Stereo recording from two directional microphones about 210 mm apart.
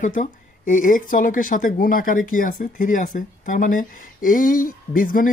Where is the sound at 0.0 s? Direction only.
35° left (ahead or behind).